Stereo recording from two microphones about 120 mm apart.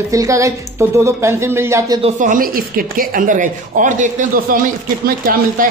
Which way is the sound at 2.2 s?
90° right.